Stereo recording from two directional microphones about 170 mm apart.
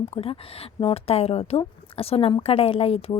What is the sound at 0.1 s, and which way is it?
Speech, 35° left (ahead or behind).